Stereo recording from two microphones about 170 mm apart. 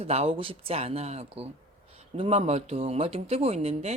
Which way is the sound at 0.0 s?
35° right (ahead or behind).